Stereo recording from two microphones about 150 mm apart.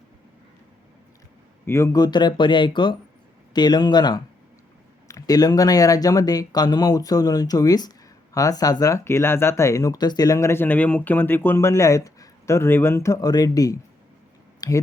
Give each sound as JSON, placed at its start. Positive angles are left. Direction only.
{"t": 1.6, "sound": "speech", "side_deg": 20}